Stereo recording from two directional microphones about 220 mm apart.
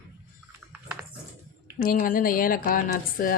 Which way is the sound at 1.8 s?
40° left (ahead or behind).